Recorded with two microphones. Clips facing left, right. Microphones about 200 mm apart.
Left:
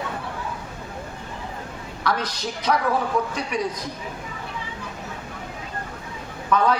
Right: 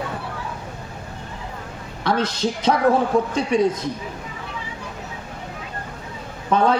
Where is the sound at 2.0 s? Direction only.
25° right (ahead or behind).